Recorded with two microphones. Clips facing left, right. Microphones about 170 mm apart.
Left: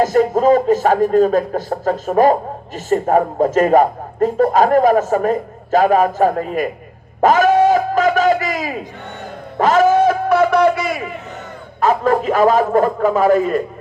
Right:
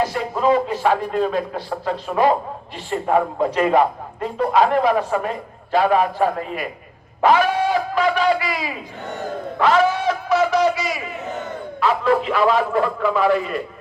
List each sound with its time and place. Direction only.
0.0 s speech: 45° left (ahead or behind)
7.2 s a sound: 45° left (ahead or behind)
11.8 s speech: 45° left (ahead or behind)